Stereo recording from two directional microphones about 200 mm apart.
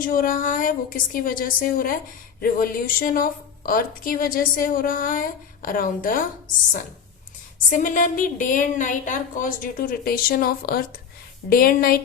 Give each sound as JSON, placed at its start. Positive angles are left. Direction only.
{"t": 0.0, "sound": "a woman's voice", "side_deg": 45}
{"t": 7.7, "sound": "a woman's voice", "side_deg": 40}